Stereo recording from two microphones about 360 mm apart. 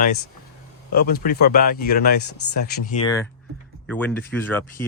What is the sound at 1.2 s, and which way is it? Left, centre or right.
Speech, left.